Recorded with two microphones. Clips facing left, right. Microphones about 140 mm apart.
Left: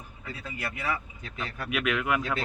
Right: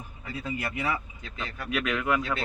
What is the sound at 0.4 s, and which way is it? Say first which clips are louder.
Speech: right 5 dB; 25° right (ahead or behind).